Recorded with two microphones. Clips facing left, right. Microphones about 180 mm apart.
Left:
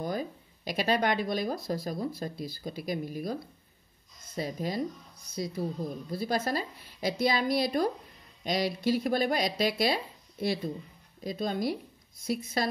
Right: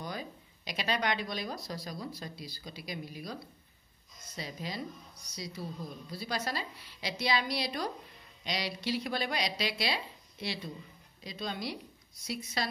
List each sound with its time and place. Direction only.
0.0 s speech: 50° left (ahead or behind)
4.4 s speech: 45° left (ahead or behind)